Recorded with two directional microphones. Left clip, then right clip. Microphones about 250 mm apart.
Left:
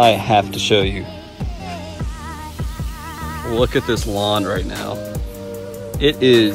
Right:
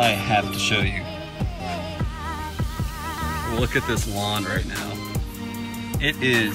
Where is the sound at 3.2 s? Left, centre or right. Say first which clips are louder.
Left 2 dB; centre.